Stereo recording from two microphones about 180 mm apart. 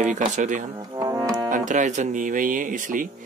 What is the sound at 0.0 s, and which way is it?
Speech, 45° right (ahead or behind).